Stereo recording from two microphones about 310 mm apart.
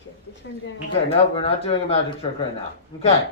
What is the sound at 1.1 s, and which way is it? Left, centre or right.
Speech, centre.